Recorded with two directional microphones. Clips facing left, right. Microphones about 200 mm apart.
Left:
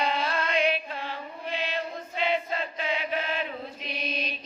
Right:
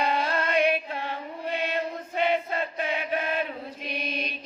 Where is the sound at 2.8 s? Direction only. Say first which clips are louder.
Even; 50° right (ahead or behind).